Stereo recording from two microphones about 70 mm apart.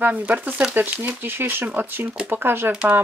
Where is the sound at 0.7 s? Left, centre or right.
Right.